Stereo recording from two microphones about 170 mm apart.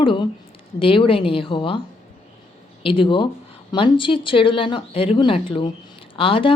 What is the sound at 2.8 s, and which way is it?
Speech, 30° left (ahead or behind).